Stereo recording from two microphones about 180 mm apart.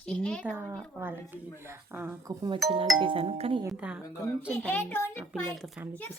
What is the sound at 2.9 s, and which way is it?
Speech, 30° right (ahead or behind).